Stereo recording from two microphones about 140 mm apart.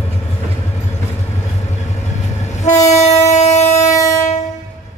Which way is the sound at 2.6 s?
55° left (ahead or behind).